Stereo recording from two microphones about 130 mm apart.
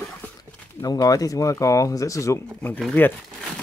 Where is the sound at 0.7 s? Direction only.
30° left (ahead or behind).